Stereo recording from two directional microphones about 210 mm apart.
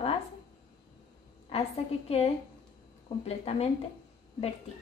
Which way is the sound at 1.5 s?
30° left (ahead or behind).